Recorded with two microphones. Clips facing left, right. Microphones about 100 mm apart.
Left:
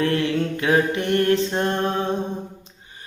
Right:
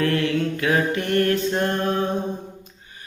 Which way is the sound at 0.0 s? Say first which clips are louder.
Even; 25° left (ahead or behind).